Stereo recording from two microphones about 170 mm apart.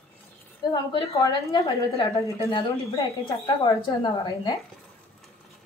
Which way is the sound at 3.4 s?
25° left (ahead or behind).